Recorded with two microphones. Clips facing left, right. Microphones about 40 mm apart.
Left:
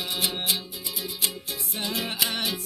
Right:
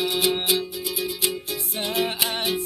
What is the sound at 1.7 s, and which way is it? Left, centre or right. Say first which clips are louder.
Music: right 4 dB; right.